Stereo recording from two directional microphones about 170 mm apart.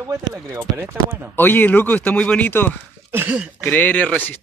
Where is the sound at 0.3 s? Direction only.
10° right (ahead or behind).